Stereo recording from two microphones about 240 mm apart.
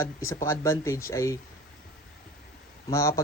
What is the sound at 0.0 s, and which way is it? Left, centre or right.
A man's voice, centre.